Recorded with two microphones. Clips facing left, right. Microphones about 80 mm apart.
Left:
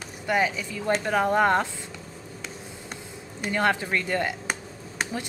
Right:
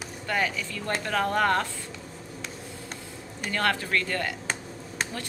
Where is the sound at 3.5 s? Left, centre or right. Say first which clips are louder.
Left 3 dB; centre.